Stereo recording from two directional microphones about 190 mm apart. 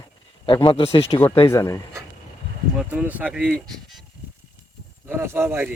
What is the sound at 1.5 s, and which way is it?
Speech, 15° left (ahead or behind).